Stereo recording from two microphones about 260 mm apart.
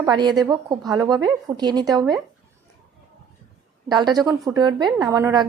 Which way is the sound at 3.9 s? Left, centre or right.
Centre.